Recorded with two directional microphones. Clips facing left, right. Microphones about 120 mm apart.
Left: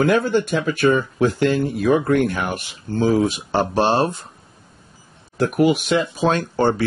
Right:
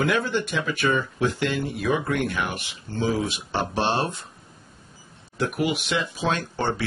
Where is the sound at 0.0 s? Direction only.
45° left (ahead or behind).